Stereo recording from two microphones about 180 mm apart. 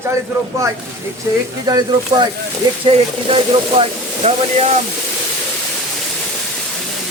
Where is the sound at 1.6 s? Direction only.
25° right (ahead or behind).